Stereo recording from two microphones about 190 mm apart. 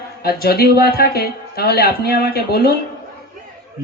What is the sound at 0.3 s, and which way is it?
Speech, 55° left (ahead or behind).